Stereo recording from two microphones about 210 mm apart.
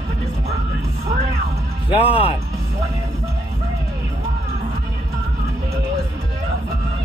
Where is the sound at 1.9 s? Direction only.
25° left (ahead or behind).